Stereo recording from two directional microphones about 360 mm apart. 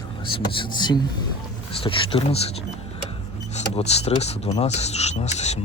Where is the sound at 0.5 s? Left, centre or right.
Centre.